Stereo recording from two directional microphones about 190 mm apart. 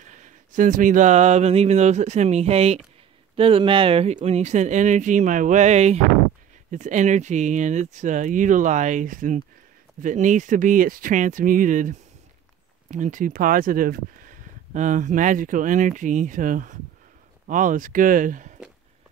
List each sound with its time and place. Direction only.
0.0 s speech: 40° right (ahead or behind)